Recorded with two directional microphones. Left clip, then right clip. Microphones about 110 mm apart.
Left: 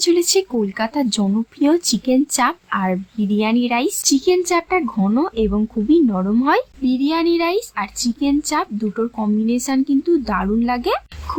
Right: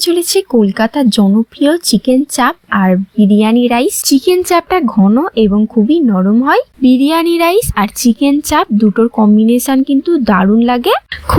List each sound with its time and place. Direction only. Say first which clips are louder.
0.0 s a woman's voice: right 4 dB; 35° right (ahead or behind)
2.1 s speech: right 5 dB; 40° right (ahead or behind)
4.9 s a woman's voice: right 8 dB; 20° right (ahead or behind)
6.8 s a woman's voice: right 8 dB; 55° right (ahead or behind)